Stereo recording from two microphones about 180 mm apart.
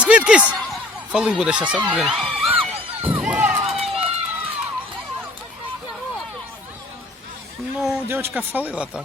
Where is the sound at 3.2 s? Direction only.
10° right (ahead or behind).